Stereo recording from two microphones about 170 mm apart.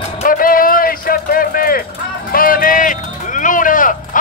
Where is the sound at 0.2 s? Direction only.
55° left (ahead or behind).